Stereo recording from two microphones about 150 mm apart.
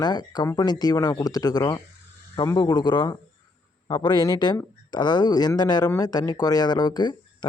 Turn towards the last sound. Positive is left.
turn(degrees=30)  # may be behind; listen again after turning